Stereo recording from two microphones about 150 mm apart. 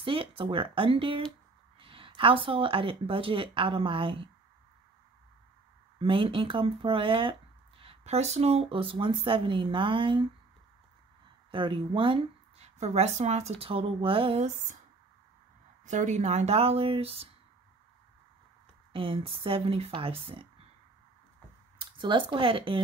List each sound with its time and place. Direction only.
0.0 s speech: 35° right (ahead or behind)
5.9 s speech: 35° right (ahead or behind)
11.5 s speech: 35° right (ahead or behind)
15.8 s speech: 55° right (ahead or behind); by 17.3 s 40° right (ahead or behind)
18.9 s speech: 35° right (ahead or behind)
21.7 s speech: 35° right (ahead or behind)